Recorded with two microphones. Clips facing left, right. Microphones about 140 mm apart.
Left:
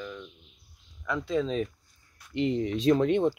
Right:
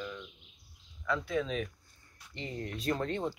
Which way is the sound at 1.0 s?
20° left (ahead or behind).